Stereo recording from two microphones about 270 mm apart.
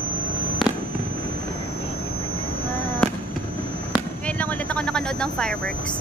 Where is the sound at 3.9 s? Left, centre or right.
Centre.